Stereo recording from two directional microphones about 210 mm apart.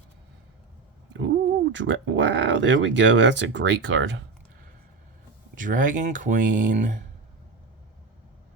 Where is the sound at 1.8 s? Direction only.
60° right (ahead or behind).